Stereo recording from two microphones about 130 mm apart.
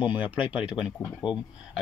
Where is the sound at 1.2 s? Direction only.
40° left (ahead or behind).